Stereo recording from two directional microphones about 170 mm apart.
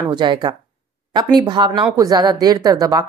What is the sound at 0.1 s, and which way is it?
A woman's voice, 25° right (ahead or behind).